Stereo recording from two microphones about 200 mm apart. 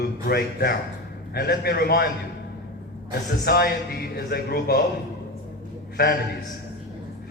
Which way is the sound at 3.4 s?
50° left (ahead or behind).